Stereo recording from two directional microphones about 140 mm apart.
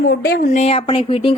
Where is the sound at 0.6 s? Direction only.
40° left (ahead or behind).